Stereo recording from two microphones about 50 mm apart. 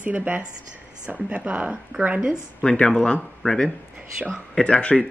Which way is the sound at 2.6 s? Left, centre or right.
Centre.